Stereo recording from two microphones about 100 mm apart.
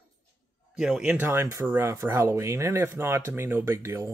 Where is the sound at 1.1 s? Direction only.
20° right (ahead or behind).